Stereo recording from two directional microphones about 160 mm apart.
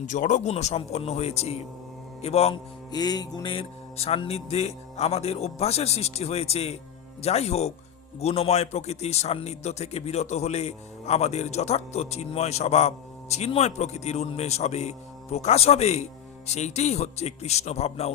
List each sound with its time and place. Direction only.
0.0 s speech: 50° left (ahead or behind)
2.9 s speech: 25° left (ahead or behind); by 18.1 s 40° left (ahead or behind)